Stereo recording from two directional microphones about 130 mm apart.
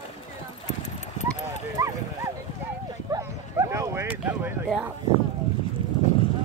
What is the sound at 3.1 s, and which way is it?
Bow-wow, 25° right (ahead or behind).